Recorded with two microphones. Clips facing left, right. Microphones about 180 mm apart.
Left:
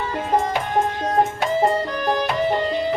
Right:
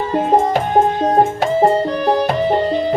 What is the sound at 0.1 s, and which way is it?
Music, 45° right (ahead or behind).